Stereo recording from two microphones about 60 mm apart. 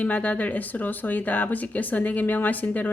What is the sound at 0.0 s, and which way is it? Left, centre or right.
Speech, left.